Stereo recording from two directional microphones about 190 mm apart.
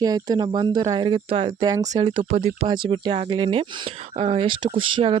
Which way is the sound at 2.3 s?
40° right (ahead or behind).